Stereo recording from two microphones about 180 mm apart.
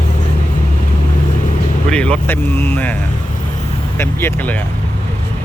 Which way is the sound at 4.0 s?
15° left (ahead or behind).